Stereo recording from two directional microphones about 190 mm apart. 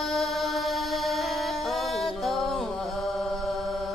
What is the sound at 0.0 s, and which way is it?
Music, centre (ahead or behind).